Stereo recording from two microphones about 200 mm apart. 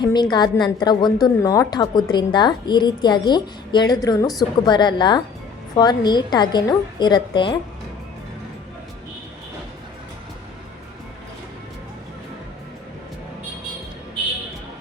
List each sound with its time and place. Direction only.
0.0 s a woman's voice: 20° left (ahead or behind)